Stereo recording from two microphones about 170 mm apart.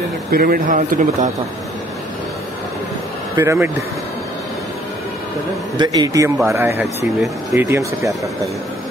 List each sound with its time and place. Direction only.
0.3 s speech: 60° right (ahead or behind)
3.3 s speech: 15° right (ahead or behind)
5.8 s a man's voice: 20° right (ahead or behind)